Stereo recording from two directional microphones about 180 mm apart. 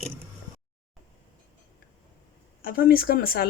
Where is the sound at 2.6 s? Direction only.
55° left (ahead or behind).